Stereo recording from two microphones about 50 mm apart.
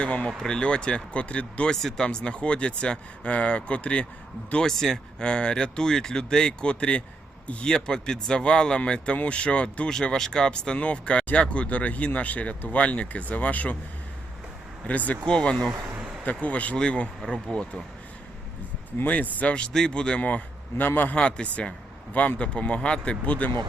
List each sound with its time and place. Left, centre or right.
0.0 s speech: left
0.3 s speech: centre
1.7 s speech: centre
4.5 s speech: centre
5.2 s a man's voice: centre
7.7 s speech: centre; by 13.7 s left
14.8 s speech: left
15.3 s speech: centre
16.2 s speech: left
19.0 s speech: left
20.2 s a man's voice: left
21.2 s speech: left